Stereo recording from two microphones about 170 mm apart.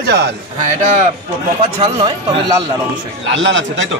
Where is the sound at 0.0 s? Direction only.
75° right (ahead or behind).